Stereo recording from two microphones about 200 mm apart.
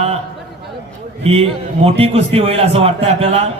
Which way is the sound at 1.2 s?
30° right (ahead or behind).